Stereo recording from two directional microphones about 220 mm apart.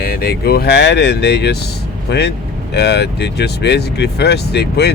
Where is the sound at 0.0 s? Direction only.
45° left (ahead or behind).